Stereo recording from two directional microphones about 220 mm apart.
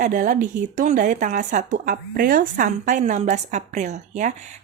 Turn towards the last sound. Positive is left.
turn(degrees=-35)  # may be behind; listen again after turning